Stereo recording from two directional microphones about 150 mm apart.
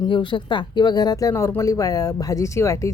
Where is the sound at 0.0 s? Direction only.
30° left (ahead or behind).